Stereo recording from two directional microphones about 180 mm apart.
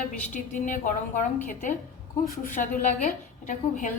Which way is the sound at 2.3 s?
45° left (ahead or behind).